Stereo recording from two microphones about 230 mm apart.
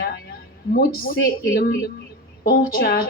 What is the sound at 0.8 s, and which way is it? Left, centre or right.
A woman's voice, left.